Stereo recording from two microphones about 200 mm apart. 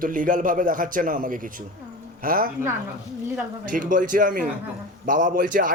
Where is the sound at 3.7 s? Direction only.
40° right (ahead or behind).